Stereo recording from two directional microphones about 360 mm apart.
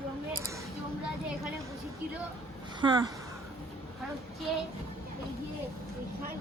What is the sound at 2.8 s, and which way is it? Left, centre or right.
Speech, centre.